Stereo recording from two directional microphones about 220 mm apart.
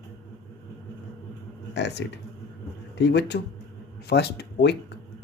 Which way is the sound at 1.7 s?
50° left (ahead or behind).